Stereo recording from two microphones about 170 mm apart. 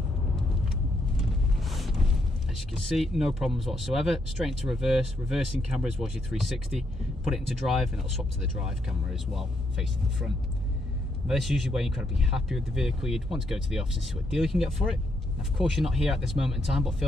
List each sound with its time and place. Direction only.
1.6 s boat: centre (ahead or behind)
2.5 s speech: centre (ahead or behind)